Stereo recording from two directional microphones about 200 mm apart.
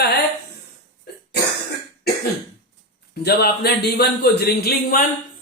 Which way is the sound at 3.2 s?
55° left (ahead or behind).